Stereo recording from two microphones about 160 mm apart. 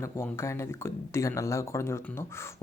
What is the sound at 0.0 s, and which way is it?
Speech, 15° left (ahead or behind).